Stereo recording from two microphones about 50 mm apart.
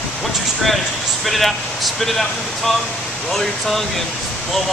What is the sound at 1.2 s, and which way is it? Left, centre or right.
Speech, centre.